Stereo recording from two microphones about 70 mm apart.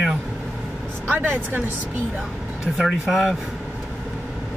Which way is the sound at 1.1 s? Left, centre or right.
Right.